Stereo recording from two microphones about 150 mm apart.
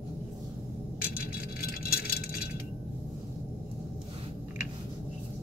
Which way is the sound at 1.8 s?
90° left.